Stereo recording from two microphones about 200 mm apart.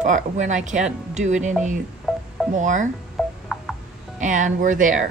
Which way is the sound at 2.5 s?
40° right (ahead or behind).